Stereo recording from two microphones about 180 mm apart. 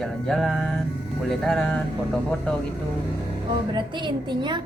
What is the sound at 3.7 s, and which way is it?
Speech, 25° right (ahead or behind).